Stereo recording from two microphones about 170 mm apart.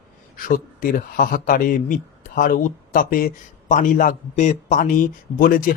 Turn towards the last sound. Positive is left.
turn(degrees=55)  # may be behind; listen again after turning